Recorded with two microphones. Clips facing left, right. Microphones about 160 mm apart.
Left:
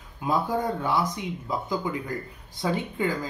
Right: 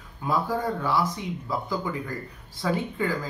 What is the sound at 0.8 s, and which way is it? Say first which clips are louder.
Speech: even; 20° left (ahead or behind).